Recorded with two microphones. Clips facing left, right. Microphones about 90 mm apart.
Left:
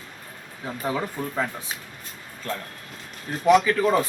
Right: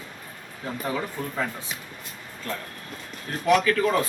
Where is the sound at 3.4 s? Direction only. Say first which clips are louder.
Left 3 dB; 15° left (ahead or behind).